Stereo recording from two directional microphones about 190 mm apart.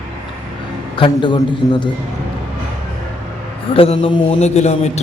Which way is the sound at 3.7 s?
30° left (ahead or behind).